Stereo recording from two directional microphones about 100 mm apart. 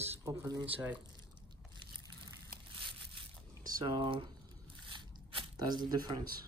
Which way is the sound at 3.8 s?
55° right (ahead or behind).